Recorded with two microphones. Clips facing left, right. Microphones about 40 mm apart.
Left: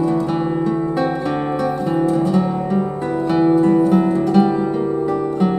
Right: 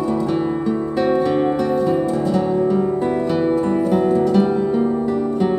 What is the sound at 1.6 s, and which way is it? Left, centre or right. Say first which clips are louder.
Music: right 1 dB; centre.